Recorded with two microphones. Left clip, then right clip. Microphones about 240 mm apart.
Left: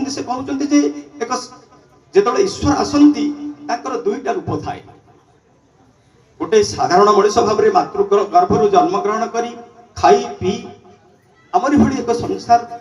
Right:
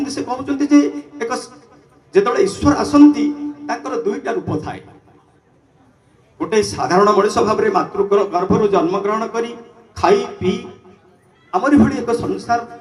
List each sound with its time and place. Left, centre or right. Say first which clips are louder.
0.0 s a man's voice: even; right
6.4 s a man's voice: left 3 dB; right